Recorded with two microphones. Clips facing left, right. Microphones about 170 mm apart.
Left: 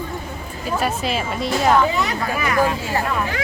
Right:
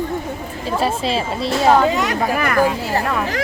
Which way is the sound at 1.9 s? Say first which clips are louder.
Right 3 dB; 75° right (ahead or behind).